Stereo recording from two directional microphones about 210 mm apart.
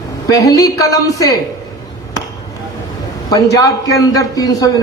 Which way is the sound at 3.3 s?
15° left (ahead or behind).